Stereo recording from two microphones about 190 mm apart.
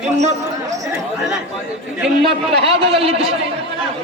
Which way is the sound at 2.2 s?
30° right (ahead or behind).